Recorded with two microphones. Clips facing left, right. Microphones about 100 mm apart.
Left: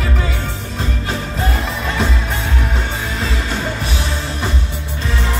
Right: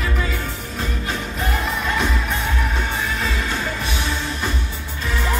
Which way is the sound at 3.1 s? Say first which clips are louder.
Left 2 dB; 30° left (ahead or behind).